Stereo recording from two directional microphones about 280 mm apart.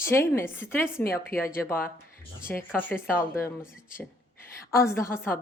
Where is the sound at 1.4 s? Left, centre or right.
Left.